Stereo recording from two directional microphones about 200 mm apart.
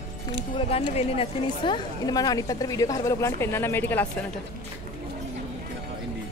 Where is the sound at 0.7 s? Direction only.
30° left (ahead or behind); by 4.0 s 10° left (ahead or behind).